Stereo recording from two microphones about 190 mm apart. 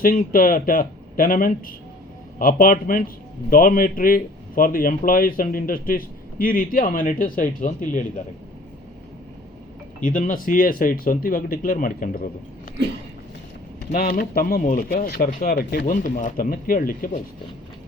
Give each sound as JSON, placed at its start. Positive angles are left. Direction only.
{"t": 0.0, "sound": "speech", "side_deg": 45}
{"t": 10.0, "sound": "speech", "side_deg": 45}
{"t": 13.9, "sound": "speech", "side_deg": 50}